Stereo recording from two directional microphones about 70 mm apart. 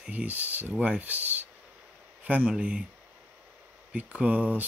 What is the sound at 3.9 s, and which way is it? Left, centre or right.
Speech, centre.